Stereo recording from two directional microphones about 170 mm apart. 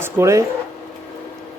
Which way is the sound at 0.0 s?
15° right (ahead or behind).